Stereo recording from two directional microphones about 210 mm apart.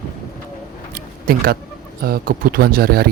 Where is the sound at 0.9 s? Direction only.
45° right (ahead or behind).